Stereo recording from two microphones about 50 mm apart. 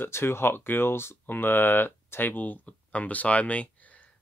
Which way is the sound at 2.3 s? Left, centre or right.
Left.